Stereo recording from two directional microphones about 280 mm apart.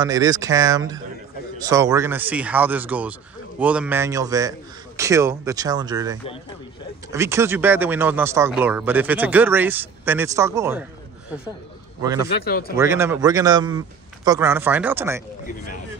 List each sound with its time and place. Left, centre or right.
0.0 s speech: centre
12.0 s speech: centre
12.4 s speech: left
12.7 s speech: centre